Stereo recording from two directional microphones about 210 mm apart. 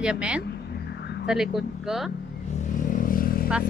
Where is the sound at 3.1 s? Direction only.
45° left (ahead or behind).